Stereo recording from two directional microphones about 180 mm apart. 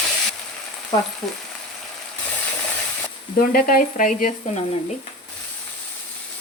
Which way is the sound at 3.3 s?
55° left (ahead or behind).